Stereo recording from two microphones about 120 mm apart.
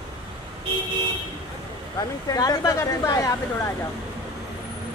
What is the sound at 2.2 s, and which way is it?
A woman's voice, 30° left (ahead or behind).